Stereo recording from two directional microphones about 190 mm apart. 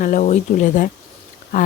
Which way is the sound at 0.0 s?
40° left (ahead or behind).